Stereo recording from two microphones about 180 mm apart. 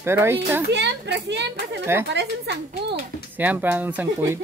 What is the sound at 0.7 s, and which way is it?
A woman's voice, 75° right (ahead or behind).